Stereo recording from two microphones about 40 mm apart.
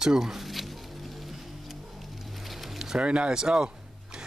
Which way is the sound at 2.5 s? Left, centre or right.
Centre.